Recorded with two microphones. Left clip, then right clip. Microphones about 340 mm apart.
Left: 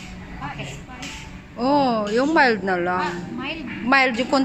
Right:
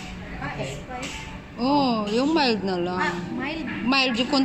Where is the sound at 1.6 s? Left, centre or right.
Left.